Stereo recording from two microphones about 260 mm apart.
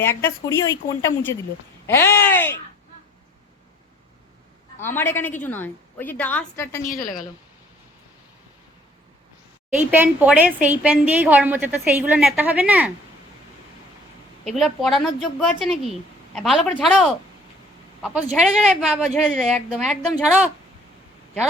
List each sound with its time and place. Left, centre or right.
0.0 s a woman's voice: centre
1.9 s a sound: centre
4.9 s a woman's voice: centre
6.8 s a woman's voice: left
9.7 s a woman's voice: centre
14.4 s a woman's voice: centre